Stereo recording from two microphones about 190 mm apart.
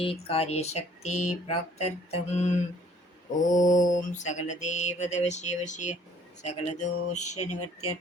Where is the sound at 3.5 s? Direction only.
40° left (ahead or behind).